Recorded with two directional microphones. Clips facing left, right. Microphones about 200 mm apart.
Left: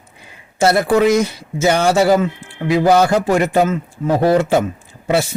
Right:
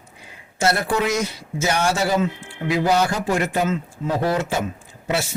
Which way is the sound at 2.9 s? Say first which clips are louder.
Left 7 dB; 65° left (ahead or behind).